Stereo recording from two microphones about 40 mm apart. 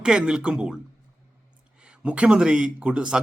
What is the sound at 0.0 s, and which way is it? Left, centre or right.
Speech, right.